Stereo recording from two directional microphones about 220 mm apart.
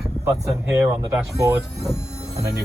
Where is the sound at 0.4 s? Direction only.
15° right (ahead or behind).